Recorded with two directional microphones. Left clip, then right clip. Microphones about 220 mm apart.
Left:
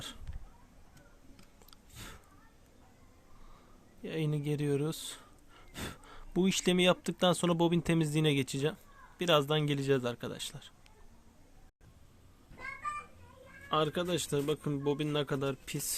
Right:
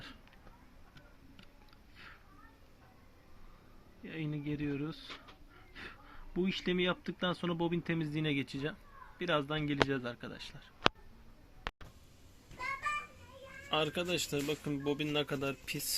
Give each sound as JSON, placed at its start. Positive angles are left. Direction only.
{"t": 4.0, "sound": "speech", "side_deg": 65}
{"t": 13.7, "sound": "speech", "side_deg": 45}